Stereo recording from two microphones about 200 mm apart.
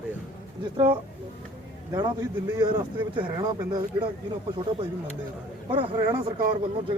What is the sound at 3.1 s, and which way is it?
Speech, 20° right (ahead or behind).